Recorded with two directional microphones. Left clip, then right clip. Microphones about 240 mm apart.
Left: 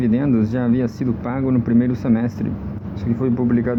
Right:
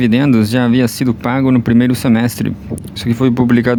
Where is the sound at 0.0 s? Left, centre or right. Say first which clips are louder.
Right 6 dB; right.